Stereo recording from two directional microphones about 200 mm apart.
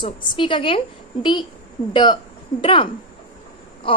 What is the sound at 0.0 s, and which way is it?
A woman's voice, 25° left (ahead or behind).